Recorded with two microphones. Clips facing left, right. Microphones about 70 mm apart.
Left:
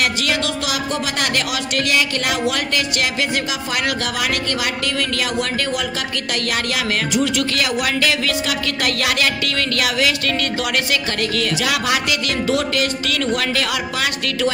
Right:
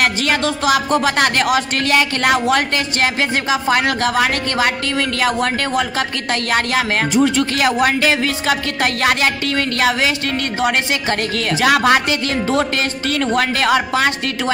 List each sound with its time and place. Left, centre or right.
0.0 s speech: right